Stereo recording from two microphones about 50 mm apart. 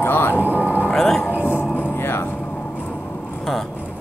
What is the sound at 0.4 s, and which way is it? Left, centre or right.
Vehicle, right.